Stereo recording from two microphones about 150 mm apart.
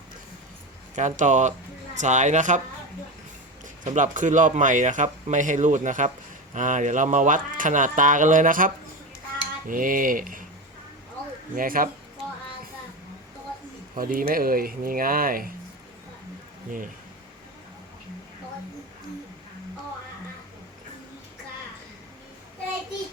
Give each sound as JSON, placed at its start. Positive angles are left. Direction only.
{"t": 0.9, "sound": "speech", "side_deg": -55}
{"t": 3.8, "sound": "speech", "side_deg": -55}
{"t": 11.5, "sound": "speech", "side_deg": -70}
{"t": 13.9, "sound": "speech", "side_deg": -70}